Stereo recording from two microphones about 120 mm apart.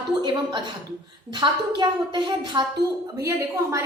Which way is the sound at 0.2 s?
40° right (ahead or behind).